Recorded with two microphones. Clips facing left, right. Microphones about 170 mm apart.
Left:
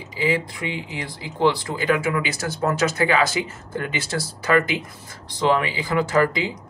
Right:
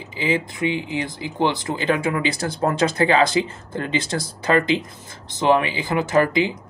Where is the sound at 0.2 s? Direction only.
20° right (ahead or behind).